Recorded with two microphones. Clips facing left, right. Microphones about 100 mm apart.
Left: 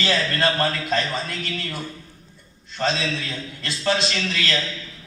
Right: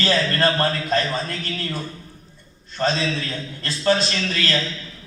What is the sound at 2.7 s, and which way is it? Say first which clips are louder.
A man's voice: right 2 dB; 40° right (ahead or behind).